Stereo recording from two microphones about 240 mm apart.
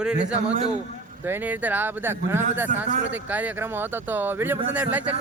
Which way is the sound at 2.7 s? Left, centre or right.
Right.